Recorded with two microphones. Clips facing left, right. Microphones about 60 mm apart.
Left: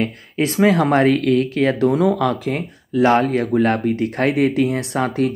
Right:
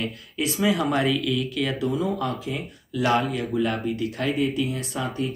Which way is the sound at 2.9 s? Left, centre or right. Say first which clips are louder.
Left 8 dB; left.